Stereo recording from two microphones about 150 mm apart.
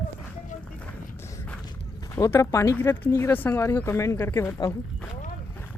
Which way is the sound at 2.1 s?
20° left (ahead or behind).